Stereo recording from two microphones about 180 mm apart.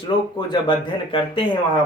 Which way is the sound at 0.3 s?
25° left (ahead or behind).